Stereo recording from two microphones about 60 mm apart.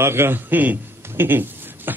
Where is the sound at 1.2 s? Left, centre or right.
Right.